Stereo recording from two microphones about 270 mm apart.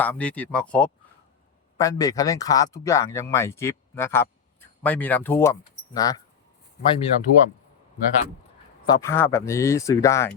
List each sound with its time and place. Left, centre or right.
0.0 s speech: centre
9.0 s speech: centre